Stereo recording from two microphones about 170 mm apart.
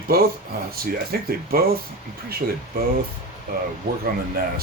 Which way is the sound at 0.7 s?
60° right (ahead or behind).